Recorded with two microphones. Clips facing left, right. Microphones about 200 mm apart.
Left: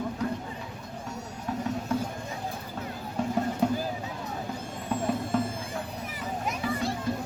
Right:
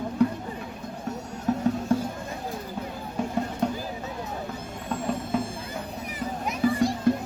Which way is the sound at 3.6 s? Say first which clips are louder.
Left 2 dB; 5° left (ahead or behind).